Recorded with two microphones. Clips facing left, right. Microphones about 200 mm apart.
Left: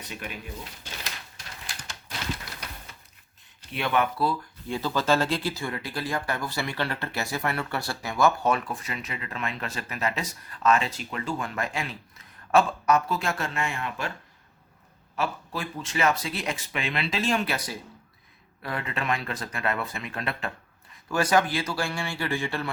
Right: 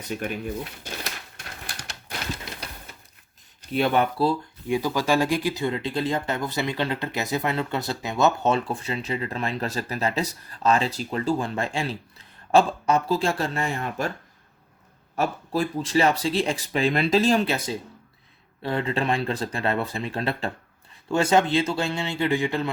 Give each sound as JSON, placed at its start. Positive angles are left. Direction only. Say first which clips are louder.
{"t": 0.2, "sound": "speech", "louder": "right 8 dB", "side_deg": -50}
{"t": 1.6, "sound": "typewriter", "louder": "right 3 dB", "side_deg": -60}
{"t": 3.7, "sound": "speech", "louder": "right 4 dB", "side_deg": -35}
{"t": 4.7, "sound": "speech", "louder": "right 2 dB", "side_deg": -15}
{"t": 15.1, "sound": "speech", "louder": "right 5 dB", "side_deg": -40}